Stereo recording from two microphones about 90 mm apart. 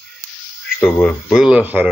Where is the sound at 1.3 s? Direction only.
5° right (ahead or behind).